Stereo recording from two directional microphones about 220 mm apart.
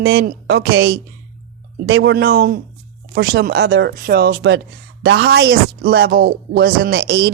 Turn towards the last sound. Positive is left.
turn(degrees=-45)  # may be behind; listen again after turning